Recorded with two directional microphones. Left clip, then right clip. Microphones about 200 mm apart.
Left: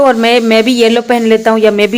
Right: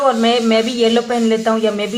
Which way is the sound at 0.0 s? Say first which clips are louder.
Left 6 dB; 45° left (ahead or behind).